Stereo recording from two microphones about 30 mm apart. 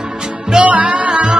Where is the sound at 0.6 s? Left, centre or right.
Right.